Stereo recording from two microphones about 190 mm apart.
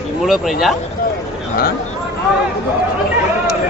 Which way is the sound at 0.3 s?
Centre (ahead or behind).